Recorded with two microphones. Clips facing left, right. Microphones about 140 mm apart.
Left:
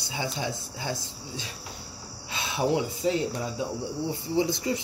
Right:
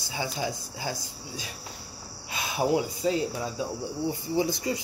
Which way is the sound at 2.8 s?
25° left (ahead or behind).